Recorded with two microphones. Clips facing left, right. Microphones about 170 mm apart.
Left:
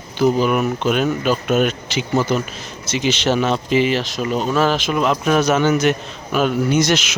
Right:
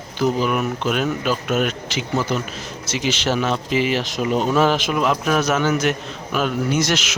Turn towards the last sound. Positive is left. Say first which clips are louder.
# left 4 dB
turn(degrees=0)  # may be behind; listen again after turning